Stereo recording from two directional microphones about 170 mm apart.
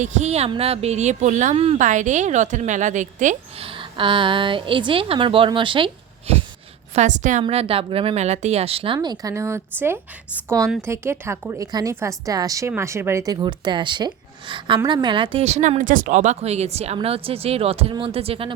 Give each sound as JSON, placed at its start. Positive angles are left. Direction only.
{"t": 0.0, "sound": "speech", "side_deg": -40}
{"t": 3.6, "sound": "a woman's voice", "side_deg": -30}
{"t": 6.9, "sound": "speech", "side_deg": -45}
{"t": 7.4, "sound": "speech", "side_deg": -35}
{"t": 10.8, "sound": "a woman's voice", "side_deg": -15}